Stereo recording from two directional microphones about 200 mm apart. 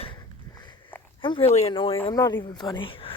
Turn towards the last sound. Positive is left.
turn(degrees=25)  # may be behind; listen again after turning